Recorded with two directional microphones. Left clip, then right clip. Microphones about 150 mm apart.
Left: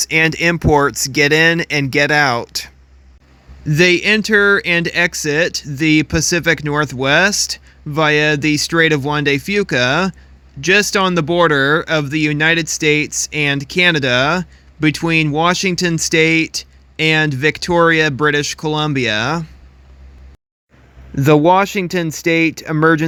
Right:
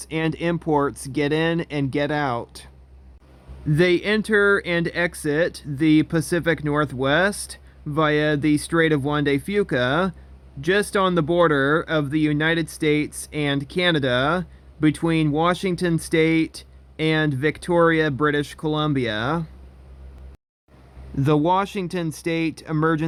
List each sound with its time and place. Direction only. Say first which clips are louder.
0.0 s speech: left 11 dB; 30° left (ahead or behind)
21.2 s speech: left 9 dB; 35° left (ahead or behind)